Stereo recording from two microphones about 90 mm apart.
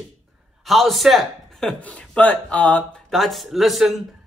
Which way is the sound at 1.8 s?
15° left (ahead or behind).